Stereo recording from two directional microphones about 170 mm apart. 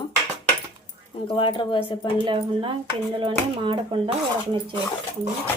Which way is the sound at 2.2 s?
30° right (ahead or behind).